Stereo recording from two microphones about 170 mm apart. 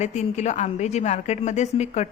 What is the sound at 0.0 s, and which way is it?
A woman's voice, 40° left (ahead or behind).